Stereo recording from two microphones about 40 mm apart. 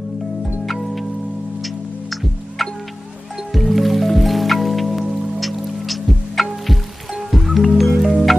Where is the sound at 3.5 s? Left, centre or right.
Centre.